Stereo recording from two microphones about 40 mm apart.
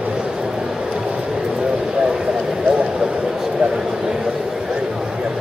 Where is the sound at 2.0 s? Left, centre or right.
Centre.